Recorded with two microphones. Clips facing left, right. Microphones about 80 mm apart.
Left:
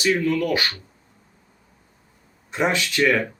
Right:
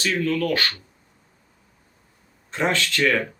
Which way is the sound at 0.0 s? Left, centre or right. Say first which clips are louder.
Left 2 dB; centre.